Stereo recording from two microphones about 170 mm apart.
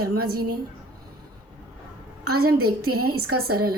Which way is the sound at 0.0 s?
60° right (ahead or behind).